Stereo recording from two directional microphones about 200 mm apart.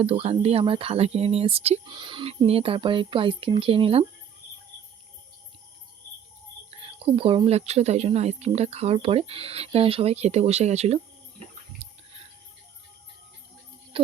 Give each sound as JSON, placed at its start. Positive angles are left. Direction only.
{"t": 0.0, "sound": "speech", "side_deg": -30}
{"t": 6.7, "sound": "speech", "side_deg": -30}
{"t": 11.8, "sound": "a sound", "side_deg": -30}
{"t": 13.9, "sound": "music", "side_deg": -25}